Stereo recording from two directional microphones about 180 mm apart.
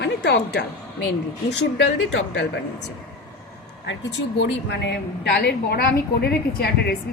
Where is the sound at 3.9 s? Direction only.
80° left.